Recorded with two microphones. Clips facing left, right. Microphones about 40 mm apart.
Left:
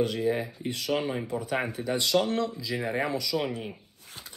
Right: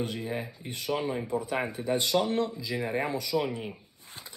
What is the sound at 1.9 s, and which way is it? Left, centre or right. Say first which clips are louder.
Speech: left 1 dB; left.